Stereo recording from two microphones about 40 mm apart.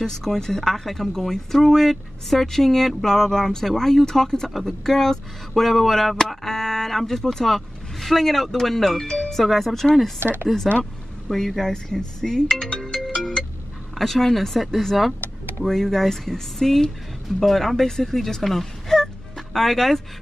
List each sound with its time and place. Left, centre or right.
0.0 s speech: centre
5.5 s speech: centre
10.2 s speech: right
10.8 s speech: centre
11.7 s speech: centre